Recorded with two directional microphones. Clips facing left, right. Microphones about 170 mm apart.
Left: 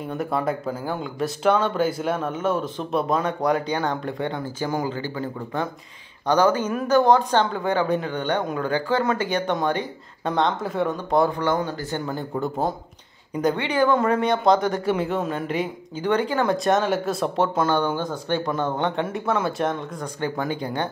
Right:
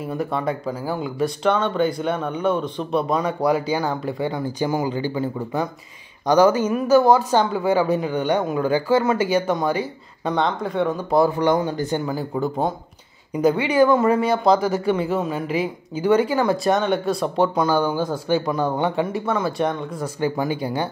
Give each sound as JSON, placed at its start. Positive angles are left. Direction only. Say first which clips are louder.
{"t": 0.0, "sound": "speech", "louder": "right 1 dB", "side_deg": 0}
{"t": 11.4, "sound": "speech", "louder": "right 4 dB", "side_deg": -15}
{"t": 12.1, "sound": "speech", "louder": "right 3 dB", "side_deg": 0}